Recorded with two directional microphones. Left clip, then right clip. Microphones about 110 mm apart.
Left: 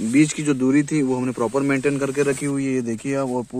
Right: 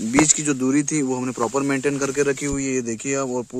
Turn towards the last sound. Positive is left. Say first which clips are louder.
# even
turn(degrees=-25)  # may be behind; listen again after turning